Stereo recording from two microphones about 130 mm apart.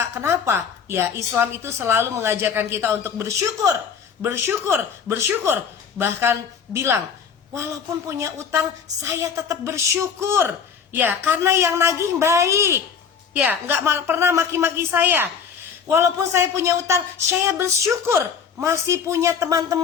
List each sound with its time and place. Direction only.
0.0 s a woman's voice: 20° right (ahead or behind)